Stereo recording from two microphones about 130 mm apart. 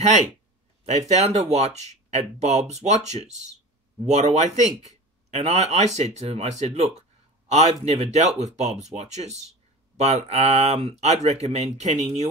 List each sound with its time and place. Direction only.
0.8 s a man's voice: 60° right (ahead or behind)